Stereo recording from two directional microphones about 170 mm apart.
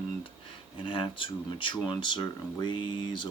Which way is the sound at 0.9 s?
30° left (ahead or behind).